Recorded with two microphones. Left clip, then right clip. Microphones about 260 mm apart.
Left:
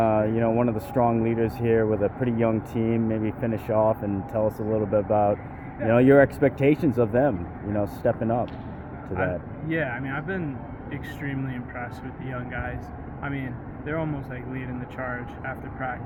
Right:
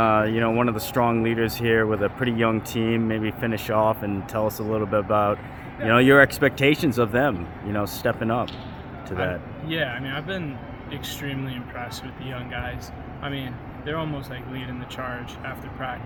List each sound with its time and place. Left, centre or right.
0.0 s speech: right
9.1 s a man's voice: right